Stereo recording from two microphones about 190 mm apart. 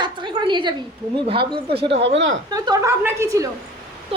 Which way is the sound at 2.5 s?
15° right (ahead or behind).